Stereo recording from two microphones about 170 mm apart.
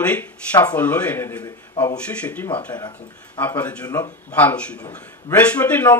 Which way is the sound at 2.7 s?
25° left (ahead or behind).